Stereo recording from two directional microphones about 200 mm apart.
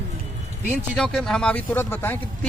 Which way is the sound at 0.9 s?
5° left (ahead or behind).